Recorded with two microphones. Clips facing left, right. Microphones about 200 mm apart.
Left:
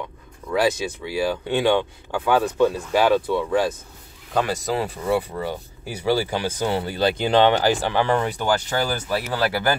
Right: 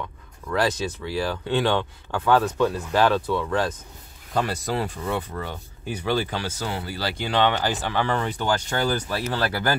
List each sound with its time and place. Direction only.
0.5 s speech: 10° left (ahead or behind)